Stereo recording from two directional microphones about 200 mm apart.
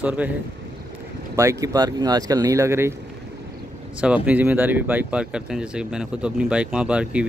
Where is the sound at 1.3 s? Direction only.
15° right (ahead or behind).